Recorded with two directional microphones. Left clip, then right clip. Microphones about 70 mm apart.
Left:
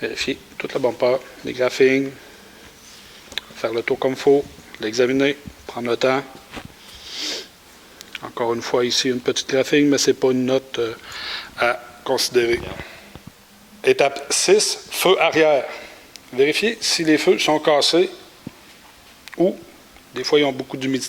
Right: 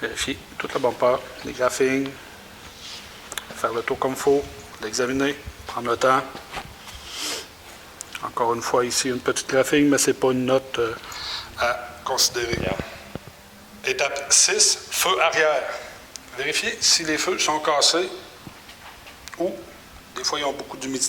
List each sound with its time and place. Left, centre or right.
0.0 s speech: left
0.8 s speech: centre
1.0 s speech: left
3.4 s a sound: left
3.7 s speech: centre
7.1 s a sound: left
8.5 s speech: left
11.1 s a sound: left
13.8 s a man's voice: left
20.1 s a man's voice: left